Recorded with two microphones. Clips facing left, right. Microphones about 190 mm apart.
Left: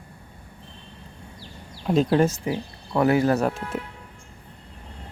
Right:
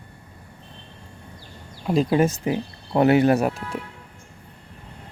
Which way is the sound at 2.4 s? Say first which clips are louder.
Right 3 dB; 20° right (ahead or behind).